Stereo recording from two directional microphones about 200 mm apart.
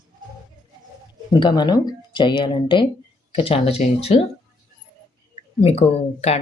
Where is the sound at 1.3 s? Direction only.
20° left (ahead or behind).